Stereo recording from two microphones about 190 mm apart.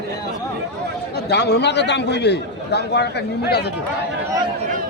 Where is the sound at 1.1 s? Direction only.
60° left (ahead or behind).